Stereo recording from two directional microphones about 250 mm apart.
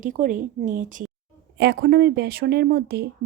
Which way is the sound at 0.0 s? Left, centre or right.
Right.